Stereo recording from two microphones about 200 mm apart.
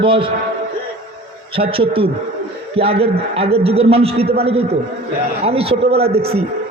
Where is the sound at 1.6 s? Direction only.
25° right (ahead or behind).